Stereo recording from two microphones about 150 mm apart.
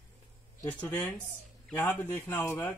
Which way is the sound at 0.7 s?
10° left (ahead or behind).